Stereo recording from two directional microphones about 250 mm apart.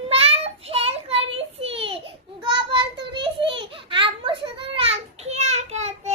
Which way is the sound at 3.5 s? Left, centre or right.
Right.